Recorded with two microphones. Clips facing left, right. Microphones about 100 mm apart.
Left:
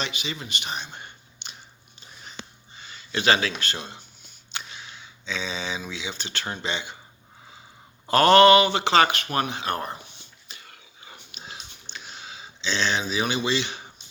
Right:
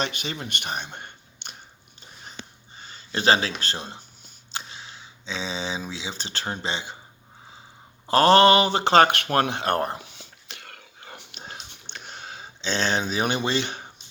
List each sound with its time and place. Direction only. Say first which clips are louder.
0.0 s speech: right 3 dB; 50° right (ahead or behind)
2.7 s speech: even; 35° right (ahead or behind)
8.0 s a sound: left 1 dB; 30° right (ahead or behind); by 13.8 s 50° right (ahead or behind)